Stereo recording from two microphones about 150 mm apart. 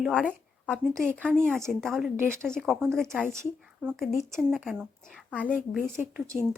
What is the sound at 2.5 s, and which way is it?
Speech, centre (ahead or behind).